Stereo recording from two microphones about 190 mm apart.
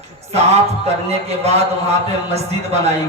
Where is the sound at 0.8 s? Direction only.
35° right (ahead or behind).